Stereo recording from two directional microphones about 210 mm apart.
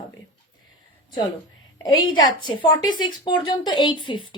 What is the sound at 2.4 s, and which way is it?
A woman's voice, 20° left (ahead or behind).